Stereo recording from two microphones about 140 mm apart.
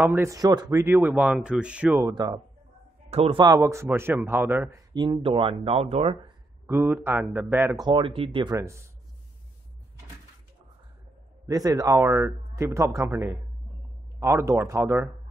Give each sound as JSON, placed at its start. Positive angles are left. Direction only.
{"t": 0.0, "sound": "speech", "side_deg": -15}
{"t": 0.9, "sound": "speech", "side_deg": -10}
{"t": 2.0, "sound": "speech", "side_deg": -25}
{"t": 3.1, "sound": "a man's voice", "side_deg": -45}
{"t": 3.3, "sound": "speech", "side_deg": -25}
{"t": 4.9, "sound": "speech", "side_deg": -30}
{"t": 6.7, "sound": "speech", "side_deg": -15}
{"t": 7.7, "sound": "speech", "side_deg": -30}
{"t": 8.5, "sound": "speech", "side_deg": -20}
{"t": 11.4, "sound": "speech", "side_deg": -25}
{"t": 14.2, "sound": "speech", "side_deg": -20}